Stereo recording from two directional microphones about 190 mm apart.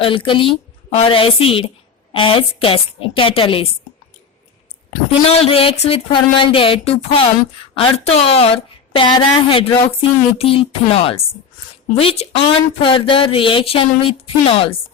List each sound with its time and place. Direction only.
0.0 s speech: 25° left (ahead or behind)
5.5 s a woman's voice: 30° left (ahead or behind)